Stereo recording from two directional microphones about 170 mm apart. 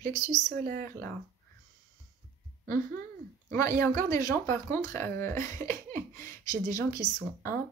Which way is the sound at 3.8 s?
15° left (ahead or behind).